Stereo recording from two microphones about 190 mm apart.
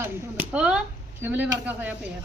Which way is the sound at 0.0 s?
10° right (ahead or behind).